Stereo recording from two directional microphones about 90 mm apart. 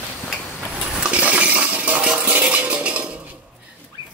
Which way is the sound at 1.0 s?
15° right (ahead or behind).